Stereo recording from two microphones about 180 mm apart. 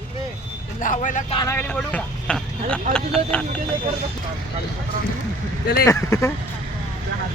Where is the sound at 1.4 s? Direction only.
10° left (ahead or behind).